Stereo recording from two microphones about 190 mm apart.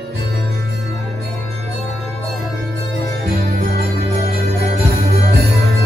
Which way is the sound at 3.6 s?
55° right (ahead or behind).